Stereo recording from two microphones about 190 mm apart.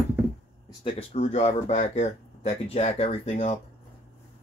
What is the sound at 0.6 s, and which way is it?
Speech, 30° left (ahead or behind).